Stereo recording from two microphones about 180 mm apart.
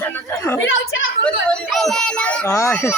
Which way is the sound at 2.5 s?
15° left (ahead or behind).